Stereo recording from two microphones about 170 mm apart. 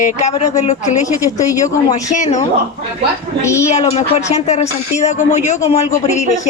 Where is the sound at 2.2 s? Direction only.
45° left (ahead or behind).